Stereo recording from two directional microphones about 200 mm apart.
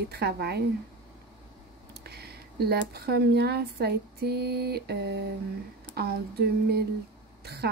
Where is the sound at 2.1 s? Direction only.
50° right (ahead or behind).